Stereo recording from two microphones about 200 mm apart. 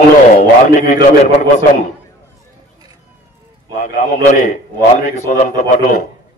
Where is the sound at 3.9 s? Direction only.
45° left (ahead or behind).